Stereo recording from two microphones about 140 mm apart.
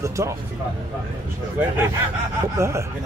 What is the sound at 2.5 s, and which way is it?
Speech, 20° right (ahead or behind).